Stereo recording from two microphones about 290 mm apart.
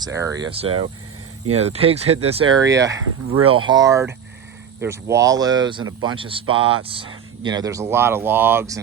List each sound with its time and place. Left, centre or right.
0.0 s speech: centre